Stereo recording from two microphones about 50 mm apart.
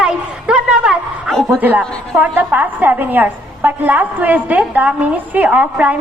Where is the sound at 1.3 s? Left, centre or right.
Centre.